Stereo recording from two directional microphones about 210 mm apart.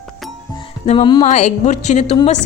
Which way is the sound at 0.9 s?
20° left (ahead or behind).